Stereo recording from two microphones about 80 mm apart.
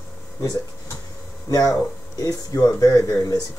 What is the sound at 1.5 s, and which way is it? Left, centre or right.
Speech, left.